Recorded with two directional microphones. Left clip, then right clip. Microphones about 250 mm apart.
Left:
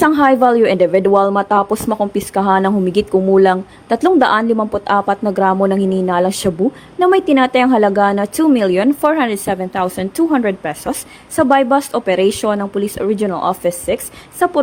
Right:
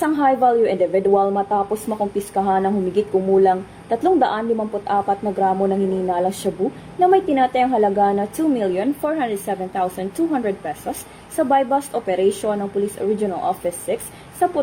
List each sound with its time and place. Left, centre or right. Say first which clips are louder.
0.0 s a woman's voice: left 5 dB; left